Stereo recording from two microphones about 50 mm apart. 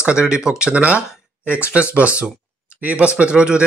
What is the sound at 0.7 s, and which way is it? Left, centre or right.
A man's voice, right.